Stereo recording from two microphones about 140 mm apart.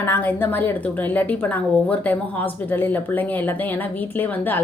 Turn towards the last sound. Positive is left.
turn(degrees=15)  # may be behind; listen again after turning